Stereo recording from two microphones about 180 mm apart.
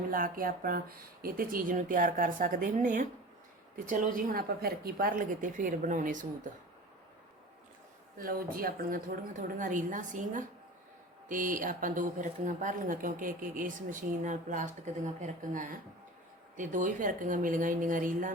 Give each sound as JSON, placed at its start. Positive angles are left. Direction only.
{"t": 0.1, "sound": "a woman's voice", "side_deg": -50}
{"t": 8.2, "sound": "a woman's voice", "side_deg": -50}